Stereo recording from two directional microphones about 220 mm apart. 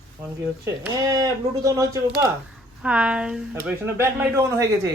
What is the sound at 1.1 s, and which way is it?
Speech, 15° right (ahead or behind).